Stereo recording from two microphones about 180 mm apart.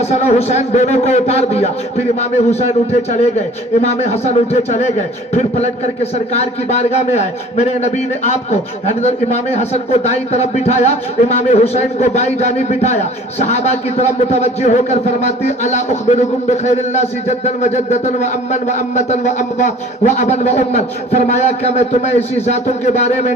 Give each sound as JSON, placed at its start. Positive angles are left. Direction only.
{"t": 0.0, "sound": "a man's voice", "side_deg": 35}